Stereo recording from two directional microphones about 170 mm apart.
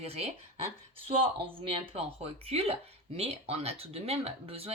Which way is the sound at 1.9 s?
35° right (ahead or behind).